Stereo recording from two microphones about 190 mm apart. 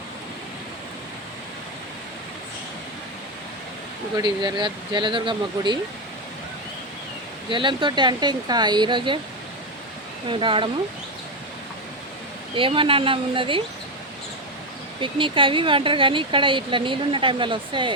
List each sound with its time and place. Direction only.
4.2 s speech: 25° right (ahead or behind)
7.5 s speech: 25° right (ahead or behind)
10.2 s speech: 25° right (ahead or behind)
12.5 s speech: 25° right (ahead or behind)
15.0 s speech: 25° right (ahead or behind)